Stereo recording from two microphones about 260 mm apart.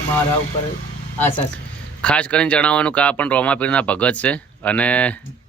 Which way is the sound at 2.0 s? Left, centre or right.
Centre.